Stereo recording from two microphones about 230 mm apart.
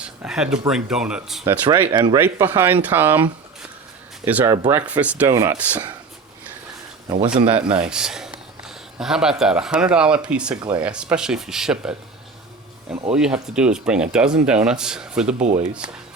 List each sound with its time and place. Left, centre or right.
0.0 s speech: centre
1.6 s speech: centre
4.3 s speech: centre
4.5 s speech: centre
4.9 s speech: centre
7.3 s speech: right
7.7 s a sound: centre
9.4 s speech: centre
10.5 s speech: centre
10.8 s speech: centre
13.1 s speech: centre